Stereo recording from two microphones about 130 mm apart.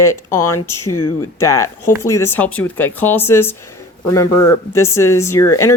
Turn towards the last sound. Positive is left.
turn(degrees=20)  # may be behind; listen again after turning